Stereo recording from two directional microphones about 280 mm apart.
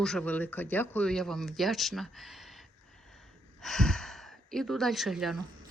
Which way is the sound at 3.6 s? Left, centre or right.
Centre.